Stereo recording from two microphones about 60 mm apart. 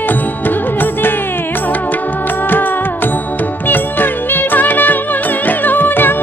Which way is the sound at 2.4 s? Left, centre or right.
Left.